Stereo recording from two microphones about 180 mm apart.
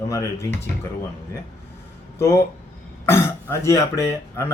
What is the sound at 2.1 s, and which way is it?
Speech, 15° left (ahead or behind).